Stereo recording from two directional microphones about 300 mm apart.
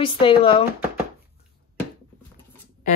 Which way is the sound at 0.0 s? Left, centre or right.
Centre.